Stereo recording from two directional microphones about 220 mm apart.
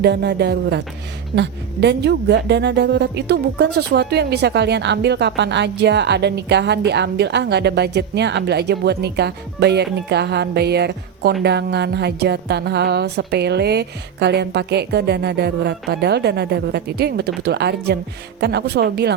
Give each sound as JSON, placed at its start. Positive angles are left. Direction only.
{"t": 0.0, "sound": "a woman's voice", "side_deg": -50}